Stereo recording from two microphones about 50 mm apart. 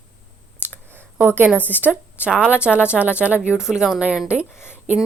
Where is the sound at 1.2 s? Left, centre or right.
Right.